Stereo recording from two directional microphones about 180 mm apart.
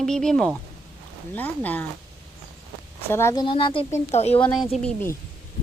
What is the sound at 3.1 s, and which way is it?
A woman's voice, 15° left (ahead or behind).